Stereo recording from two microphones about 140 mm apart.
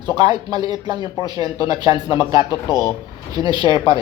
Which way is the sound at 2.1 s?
35° left (ahead or behind).